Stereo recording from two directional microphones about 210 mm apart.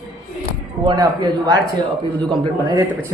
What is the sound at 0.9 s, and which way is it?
Speech, 20° right (ahead or behind).